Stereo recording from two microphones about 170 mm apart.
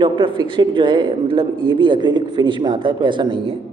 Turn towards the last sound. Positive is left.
turn(degrees=-30)  # may be behind; listen again after turning